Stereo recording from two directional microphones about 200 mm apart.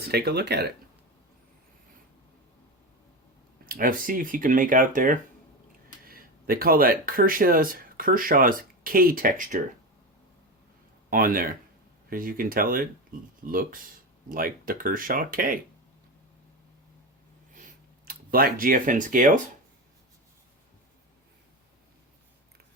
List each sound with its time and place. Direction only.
0.1 s speech: 55° right (ahead or behind)
3.7 s speech: 45° right (ahead or behind)
11.1 s speech: 45° right (ahead or behind)
18.0 s speech: 45° right (ahead or behind)